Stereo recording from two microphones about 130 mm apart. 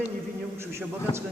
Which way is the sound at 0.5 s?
20° right (ahead or behind).